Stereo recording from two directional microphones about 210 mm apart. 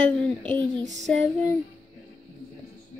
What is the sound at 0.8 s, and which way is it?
Child singing, 35° right (ahead or behind).